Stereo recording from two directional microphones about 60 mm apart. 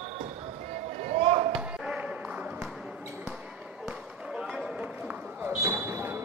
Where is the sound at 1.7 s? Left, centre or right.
Centre.